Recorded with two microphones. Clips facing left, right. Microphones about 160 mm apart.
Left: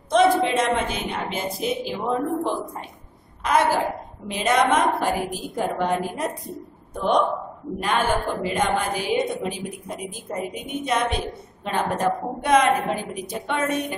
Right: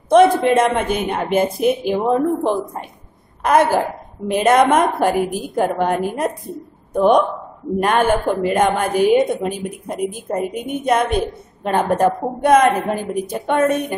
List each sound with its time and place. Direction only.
0.1 s a woman's voice: 55° right (ahead or behind)
3.4 s a woman's voice: 50° right (ahead or behind)